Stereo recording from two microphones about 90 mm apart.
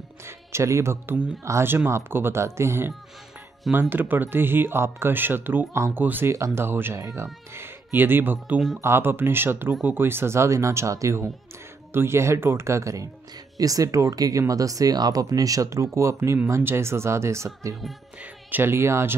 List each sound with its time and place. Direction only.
0.5 s speech: 30° right (ahead or behind)
3.9 s speech: 20° right (ahead or behind)
7.0 s speech: 40° right (ahead or behind)
7.5 s speech: 25° right (ahead or behind)